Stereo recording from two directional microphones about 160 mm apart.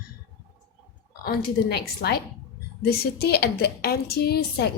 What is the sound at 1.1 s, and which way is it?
A woman's voice, 80° left.